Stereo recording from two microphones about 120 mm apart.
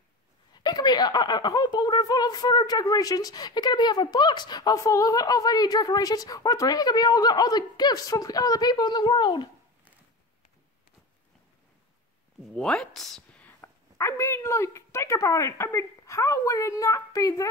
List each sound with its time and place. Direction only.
0.6 s speech: 35° left (ahead or behind)
12.5 s speech: 5° left (ahead or behind)
13.5 s a woman's voice: 25° left (ahead or behind)